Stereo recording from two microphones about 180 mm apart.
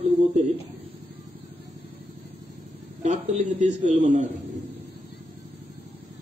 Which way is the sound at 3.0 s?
40° right (ahead or behind).